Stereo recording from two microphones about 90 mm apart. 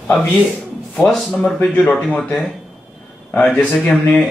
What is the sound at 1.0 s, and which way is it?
A man's voice, 10° left (ahead or behind).